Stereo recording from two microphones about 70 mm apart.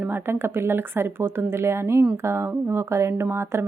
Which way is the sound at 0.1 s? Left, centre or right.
Right.